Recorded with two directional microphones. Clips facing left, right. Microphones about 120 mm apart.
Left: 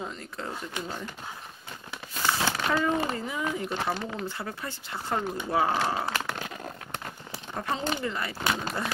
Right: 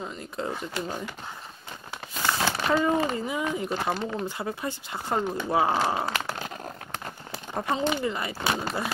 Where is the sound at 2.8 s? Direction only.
15° right (ahead or behind).